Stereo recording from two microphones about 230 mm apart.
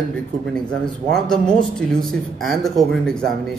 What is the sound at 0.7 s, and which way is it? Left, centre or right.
Speech, centre.